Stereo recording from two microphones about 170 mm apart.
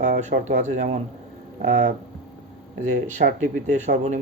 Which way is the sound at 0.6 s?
45° right (ahead or behind).